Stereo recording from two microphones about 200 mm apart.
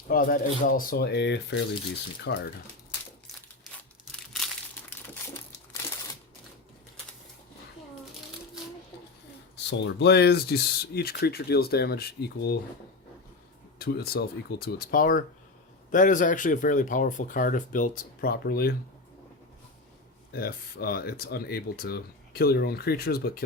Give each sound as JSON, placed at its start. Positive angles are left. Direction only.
{"t": 0.1, "sound": "speech", "side_deg": 45}
{"t": 4.1, "sound": "crumpling", "side_deg": 0}
{"t": 9.6, "sound": "speech", "side_deg": 60}
{"t": 13.7, "sound": "speech", "side_deg": 50}
{"t": 20.3, "sound": "speech", "side_deg": 50}